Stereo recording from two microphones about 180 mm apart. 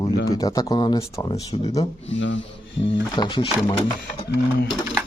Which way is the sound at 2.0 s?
90° left.